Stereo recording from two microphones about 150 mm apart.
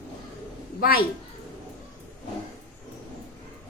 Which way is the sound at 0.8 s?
80° left.